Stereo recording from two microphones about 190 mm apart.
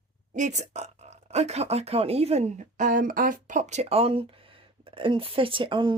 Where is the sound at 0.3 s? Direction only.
40° right (ahead or behind).